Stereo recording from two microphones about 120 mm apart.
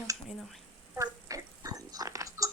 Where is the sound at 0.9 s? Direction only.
30° right (ahead or behind).